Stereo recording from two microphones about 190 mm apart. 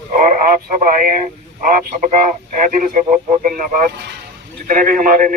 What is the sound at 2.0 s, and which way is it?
Speech, 40° right (ahead or behind).